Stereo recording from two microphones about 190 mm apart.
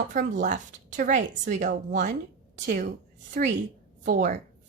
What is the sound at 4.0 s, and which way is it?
Speech, 45° right (ahead or behind).